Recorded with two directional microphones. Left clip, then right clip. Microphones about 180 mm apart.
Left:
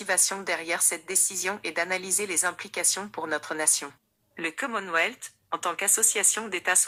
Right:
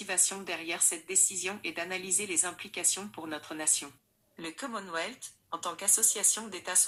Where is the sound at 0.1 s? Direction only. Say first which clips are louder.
Left 7 dB; 25° left (ahead or behind).